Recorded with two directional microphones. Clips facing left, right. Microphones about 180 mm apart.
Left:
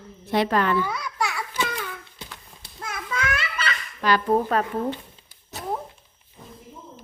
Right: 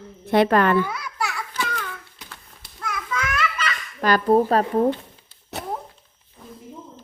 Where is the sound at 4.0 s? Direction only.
45° right (ahead or behind).